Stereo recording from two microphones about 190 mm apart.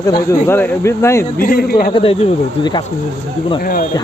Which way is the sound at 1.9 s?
30° left (ahead or behind).